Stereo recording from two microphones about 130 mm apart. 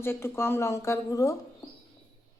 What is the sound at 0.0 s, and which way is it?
Speech, 20° left (ahead or behind).